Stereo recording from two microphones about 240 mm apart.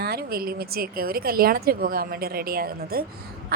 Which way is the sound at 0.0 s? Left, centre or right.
Right.